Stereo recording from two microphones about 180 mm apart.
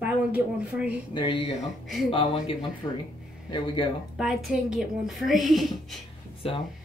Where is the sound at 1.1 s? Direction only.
30° left (ahead or behind).